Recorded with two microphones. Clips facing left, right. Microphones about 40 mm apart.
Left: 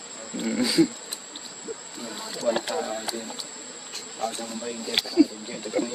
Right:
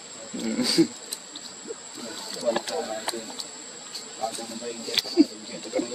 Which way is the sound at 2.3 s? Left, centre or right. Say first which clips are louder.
Left 1 dB; left.